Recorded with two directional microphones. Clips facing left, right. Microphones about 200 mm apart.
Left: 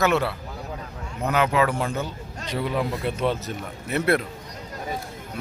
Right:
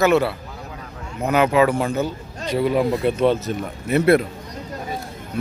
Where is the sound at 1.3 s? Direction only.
15° right (ahead or behind).